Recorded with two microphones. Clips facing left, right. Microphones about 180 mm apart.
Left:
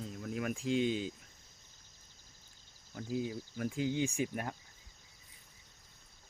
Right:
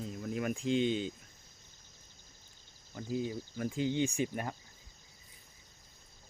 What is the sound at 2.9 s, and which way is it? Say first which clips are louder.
Speech: right 1 dB; 5° left (ahead or behind).